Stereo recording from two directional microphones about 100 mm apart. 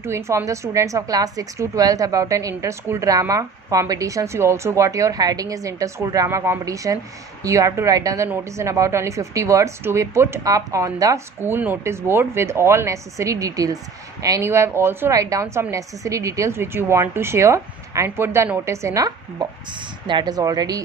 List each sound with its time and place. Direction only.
0.0 s a woman's voice: 25° right (ahead or behind)
11.4 s a woman's voice: 20° right (ahead or behind)
15.1 s a woman's voice: 35° right (ahead or behind)
20.1 s a woman's voice: 45° right (ahead or behind)